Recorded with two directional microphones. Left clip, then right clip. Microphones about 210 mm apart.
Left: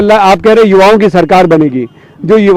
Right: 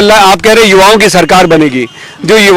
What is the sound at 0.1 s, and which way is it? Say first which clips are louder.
A man's voice: left 1 dB; 15° right (ahead or behind).